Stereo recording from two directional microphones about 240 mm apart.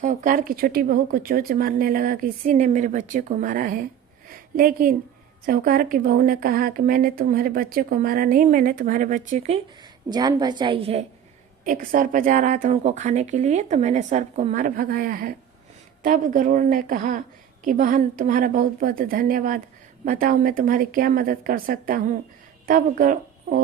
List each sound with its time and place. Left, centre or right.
0.0 s speech: right
4.3 s a sound: right
5.5 s speech: right
10.1 s a woman's voice: centre
11.6 s speech: right